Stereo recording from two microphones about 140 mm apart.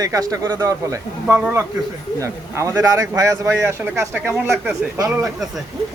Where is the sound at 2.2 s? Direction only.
20° right (ahead or behind).